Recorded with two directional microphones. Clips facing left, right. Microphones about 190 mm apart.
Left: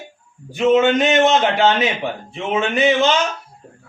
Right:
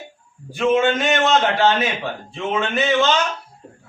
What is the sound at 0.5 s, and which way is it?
A man's voice, 20° left (ahead or behind).